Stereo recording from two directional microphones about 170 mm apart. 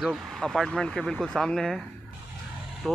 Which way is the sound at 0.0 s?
Centre (ahead or behind).